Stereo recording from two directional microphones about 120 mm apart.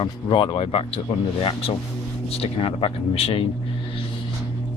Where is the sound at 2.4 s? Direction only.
50° left (ahead or behind).